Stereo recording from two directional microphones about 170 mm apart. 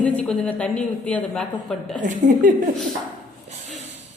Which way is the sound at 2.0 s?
50° right (ahead or behind).